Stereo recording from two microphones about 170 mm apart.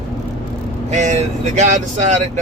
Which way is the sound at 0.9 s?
45° right (ahead or behind).